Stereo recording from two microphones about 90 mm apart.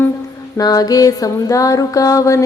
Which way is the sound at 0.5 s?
45° left (ahead or behind).